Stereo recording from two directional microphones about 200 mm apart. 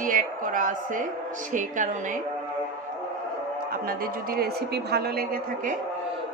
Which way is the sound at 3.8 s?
45° right (ahead or behind).